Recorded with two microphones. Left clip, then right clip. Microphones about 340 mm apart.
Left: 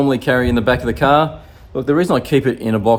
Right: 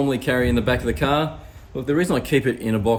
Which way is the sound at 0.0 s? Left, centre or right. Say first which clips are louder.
Left 5 dB; centre.